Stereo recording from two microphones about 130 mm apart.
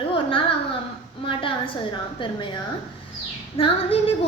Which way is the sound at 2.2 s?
40° left (ahead or behind).